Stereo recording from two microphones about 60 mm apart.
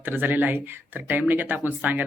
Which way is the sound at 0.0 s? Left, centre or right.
Right.